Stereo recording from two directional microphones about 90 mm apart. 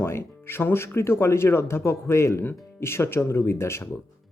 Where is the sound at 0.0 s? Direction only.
30° left (ahead or behind).